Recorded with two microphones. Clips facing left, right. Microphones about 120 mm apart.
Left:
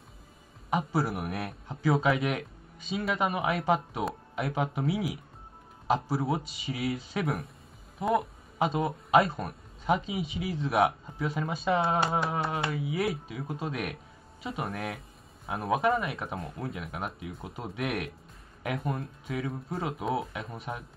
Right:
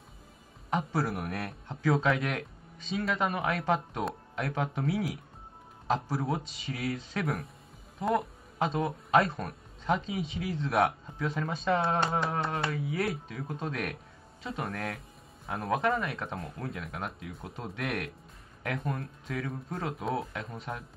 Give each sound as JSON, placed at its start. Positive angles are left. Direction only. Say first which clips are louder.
{"t": 0.7, "sound": "speech", "louder": "left 2 dB", "side_deg": 5}